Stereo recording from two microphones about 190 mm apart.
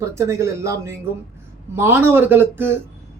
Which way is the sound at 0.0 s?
15° right (ahead or behind).